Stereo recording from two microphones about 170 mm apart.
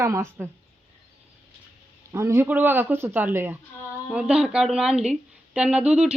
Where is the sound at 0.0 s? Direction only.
15° right (ahead or behind).